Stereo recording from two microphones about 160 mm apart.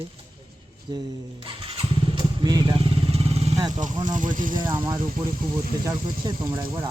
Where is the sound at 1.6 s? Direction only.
30° right (ahead or behind).